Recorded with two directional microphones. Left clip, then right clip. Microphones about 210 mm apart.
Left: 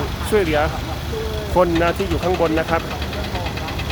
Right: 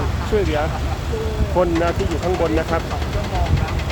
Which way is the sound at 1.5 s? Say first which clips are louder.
Left 2 dB; 15° left (ahead or behind).